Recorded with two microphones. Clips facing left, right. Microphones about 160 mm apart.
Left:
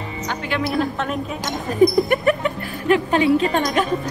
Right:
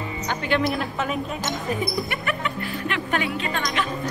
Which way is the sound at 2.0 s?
40° left (ahead or behind).